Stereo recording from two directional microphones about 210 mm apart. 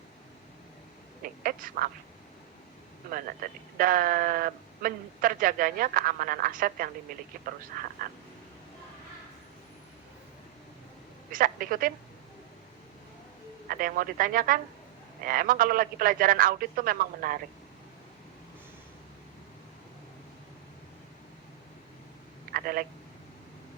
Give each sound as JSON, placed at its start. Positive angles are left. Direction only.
{"t": 1.2, "sound": "speech", "side_deg": -45}
{"t": 3.1, "sound": "a man's voice", "side_deg": -40}
{"t": 11.3, "sound": "a woman's voice", "side_deg": -40}
{"t": 13.7, "sound": "a man's voice", "side_deg": -45}
{"t": 22.5, "sound": "a man's voice", "side_deg": -45}